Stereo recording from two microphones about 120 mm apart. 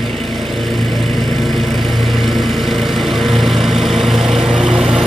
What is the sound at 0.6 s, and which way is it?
Vehicle, centre (ahead or behind).